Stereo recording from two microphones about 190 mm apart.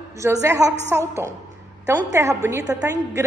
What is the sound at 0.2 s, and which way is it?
Speech, 15° right (ahead or behind).